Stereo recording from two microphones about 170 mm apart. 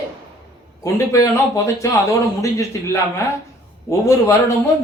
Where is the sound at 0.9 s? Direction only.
20° left (ahead or behind).